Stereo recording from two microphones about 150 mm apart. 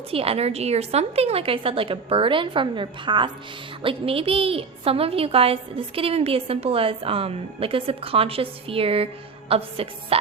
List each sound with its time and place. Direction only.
0.1 s a woman's voice: 40° right (ahead or behind)